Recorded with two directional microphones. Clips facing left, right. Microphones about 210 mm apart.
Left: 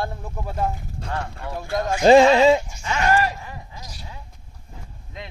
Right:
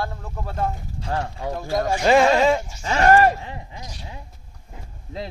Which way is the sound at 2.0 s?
30° left (ahead or behind).